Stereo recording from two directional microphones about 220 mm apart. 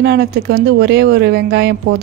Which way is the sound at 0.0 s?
50° right (ahead or behind).